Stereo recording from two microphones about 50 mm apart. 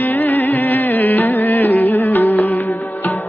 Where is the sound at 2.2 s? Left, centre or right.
Left.